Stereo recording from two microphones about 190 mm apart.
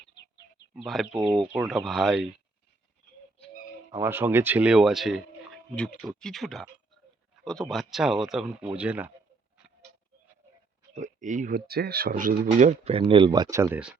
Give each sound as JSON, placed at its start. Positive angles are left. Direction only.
{"t": 0.7, "sound": "speech", "side_deg": -5}
{"t": 3.9, "sound": "speech", "side_deg": -10}
{"t": 10.9, "sound": "speech", "side_deg": -40}
{"t": 11.7, "sound": "speech", "side_deg": -55}